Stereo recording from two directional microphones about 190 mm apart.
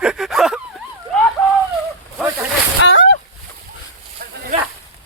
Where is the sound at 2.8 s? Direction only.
90° left.